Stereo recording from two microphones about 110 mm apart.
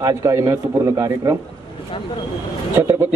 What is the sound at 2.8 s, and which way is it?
Speech, 20° right (ahead or behind).